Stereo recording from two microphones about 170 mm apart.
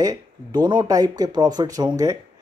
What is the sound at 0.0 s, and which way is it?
Speech, 25° right (ahead or behind).